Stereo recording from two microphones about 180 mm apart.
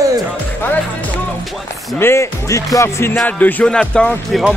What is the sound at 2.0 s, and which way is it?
Speech, 15° left (ahead or behind).